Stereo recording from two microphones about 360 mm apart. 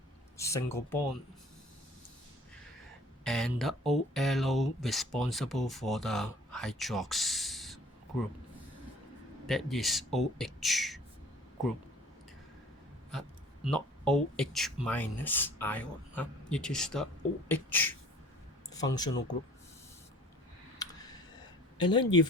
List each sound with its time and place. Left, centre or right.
0.3 s speech: centre
3.2 s speech: centre
9.5 s speech: centre
13.7 s speech: centre
21.8 s speech: centre